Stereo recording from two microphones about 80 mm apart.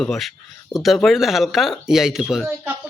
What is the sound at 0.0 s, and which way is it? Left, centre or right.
Speech, centre.